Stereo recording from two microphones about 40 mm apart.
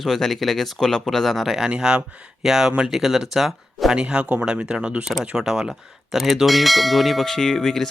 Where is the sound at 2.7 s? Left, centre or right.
Right.